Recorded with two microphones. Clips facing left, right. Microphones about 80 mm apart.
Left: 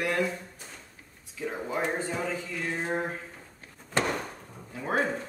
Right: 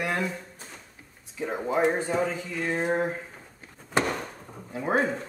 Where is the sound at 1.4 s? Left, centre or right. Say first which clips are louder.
Right 6 dB; right.